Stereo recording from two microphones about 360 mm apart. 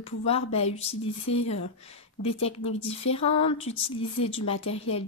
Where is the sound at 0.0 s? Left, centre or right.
Centre.